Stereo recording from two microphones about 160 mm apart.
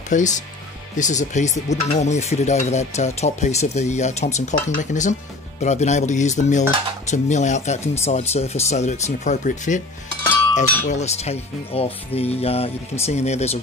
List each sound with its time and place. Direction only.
0.1 s stir: 50° left (ahead or behind)
10.5 s speech: 45° left (ahead or behind)
13.0 s stir: 45° left (ahead or behind)